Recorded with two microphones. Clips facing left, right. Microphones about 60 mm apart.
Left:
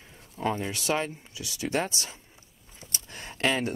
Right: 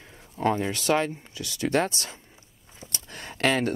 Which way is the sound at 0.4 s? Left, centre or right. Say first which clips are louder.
Right 4 dB; right.